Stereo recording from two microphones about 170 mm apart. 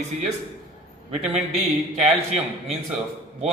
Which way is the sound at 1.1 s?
40° right (ahead or behind).